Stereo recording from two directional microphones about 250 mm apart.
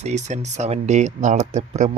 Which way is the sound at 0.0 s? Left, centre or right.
Right.